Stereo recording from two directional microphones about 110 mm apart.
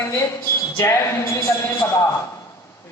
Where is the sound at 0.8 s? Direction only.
25° left (ahead or behind).